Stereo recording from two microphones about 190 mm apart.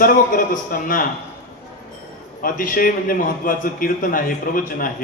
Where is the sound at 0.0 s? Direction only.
45° left (ahead or behind).